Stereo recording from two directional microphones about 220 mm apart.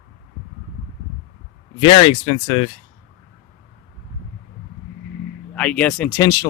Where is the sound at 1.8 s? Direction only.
25° left (ahead or behind).